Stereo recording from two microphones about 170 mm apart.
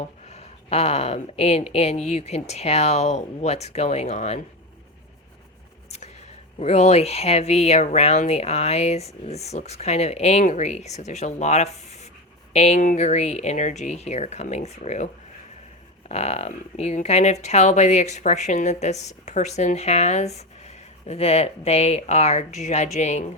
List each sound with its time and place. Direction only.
0.0 s a woman's voice: 40° left (ahead or behind)
6.6 s a woman's voice: 40° left (ahead or behind)